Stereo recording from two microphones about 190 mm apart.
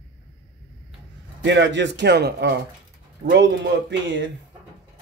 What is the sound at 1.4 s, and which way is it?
Speech, 75° right (ahead or behind).